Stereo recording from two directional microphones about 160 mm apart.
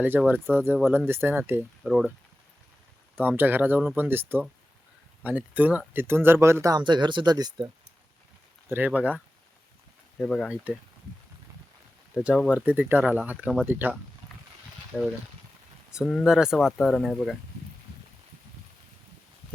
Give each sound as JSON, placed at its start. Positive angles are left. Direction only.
{"t": 0.0, "sound": "speech", "side_deg": -10}
{"t": 1.8, "sound": "speech", "side_deg": 0}
{"t": 3.2, "sound": "speech", "side_deg": -10}
{"t": 8.7, "sound": "speech", "side_deg": -10}
{"t": 10.2, "sound": "speech", "side_deg": 5}
{"t": 12.1, "sound": "speech", "side_deg": -5}
{"t": 14.9, "sound": "speech", "side_deg": 0}